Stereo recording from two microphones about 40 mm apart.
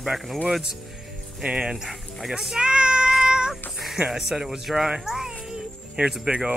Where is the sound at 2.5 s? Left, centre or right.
Right.